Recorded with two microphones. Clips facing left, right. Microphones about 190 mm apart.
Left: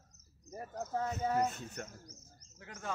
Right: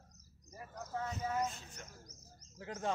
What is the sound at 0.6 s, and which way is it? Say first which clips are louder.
Speech: left 5 dB; 35° left (ahead or behind).